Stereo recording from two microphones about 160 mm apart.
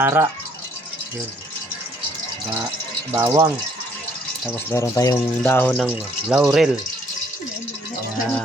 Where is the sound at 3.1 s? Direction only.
20° right (ahead or behind).